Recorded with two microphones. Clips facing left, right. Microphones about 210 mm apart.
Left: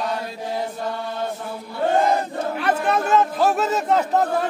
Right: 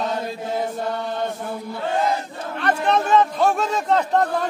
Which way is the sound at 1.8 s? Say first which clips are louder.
Left 4 dB; 50° left (ahead or behind).